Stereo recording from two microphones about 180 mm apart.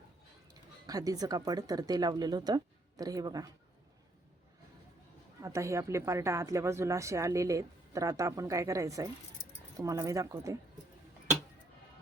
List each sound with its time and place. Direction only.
0.9 s speech: 20° right (ahead or behind)
5.4 s a woman's voice: 15° right (ahead or behind)